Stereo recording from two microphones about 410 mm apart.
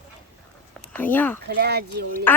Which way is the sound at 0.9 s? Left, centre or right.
Centre.